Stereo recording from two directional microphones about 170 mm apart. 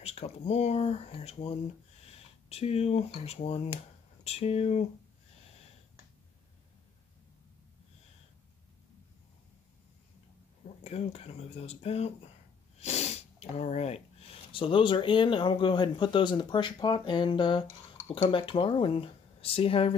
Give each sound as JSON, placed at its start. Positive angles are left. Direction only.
{"t": 0.0, "sound": "speech", "side_deg": 40}
{"t": 10.8, "sound": "speech", "side_deg": 40}